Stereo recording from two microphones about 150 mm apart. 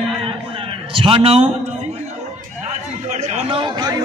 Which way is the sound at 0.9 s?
40° right (ahead or behind).